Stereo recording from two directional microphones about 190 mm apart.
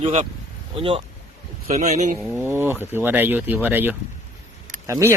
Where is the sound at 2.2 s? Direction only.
10° right (ahead or behind).